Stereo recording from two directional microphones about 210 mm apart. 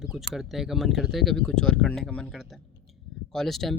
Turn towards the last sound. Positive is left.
turn(degrees=0)  # may be behind; listen again after turning